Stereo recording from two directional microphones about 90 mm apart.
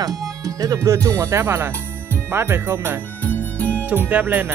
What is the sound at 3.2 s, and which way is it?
Music, 15° left (ahead or behind).